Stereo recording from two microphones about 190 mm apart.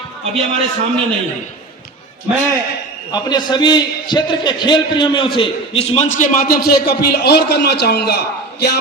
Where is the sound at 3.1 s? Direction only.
20° left (ahead or behind).